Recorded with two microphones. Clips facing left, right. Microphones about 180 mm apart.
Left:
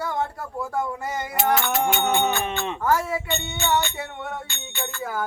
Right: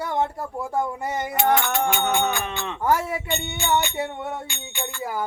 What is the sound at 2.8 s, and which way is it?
Music, 20° right (ahead or behind).